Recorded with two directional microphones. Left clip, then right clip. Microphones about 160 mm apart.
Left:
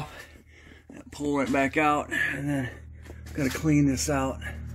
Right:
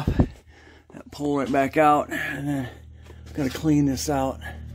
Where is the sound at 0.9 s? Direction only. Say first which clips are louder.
Right 2 dB; 30° right (ahead or behind).